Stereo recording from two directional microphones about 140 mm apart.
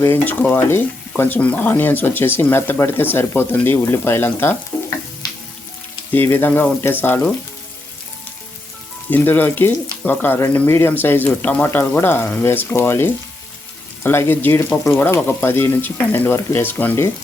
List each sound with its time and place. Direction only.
0.0 s speech: 15° left (ahead or behind)
6.1 s speech: 15° left (ahead or behind)
9.0 s speech: 15° left (ahead or behind)